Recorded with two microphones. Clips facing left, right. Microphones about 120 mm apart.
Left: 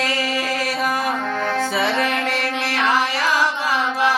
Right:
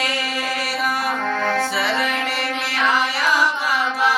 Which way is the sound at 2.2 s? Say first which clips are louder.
Left 2 dB; 15° right (ahead or behind).